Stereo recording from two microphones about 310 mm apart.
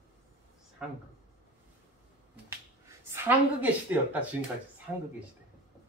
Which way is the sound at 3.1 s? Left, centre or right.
Centre.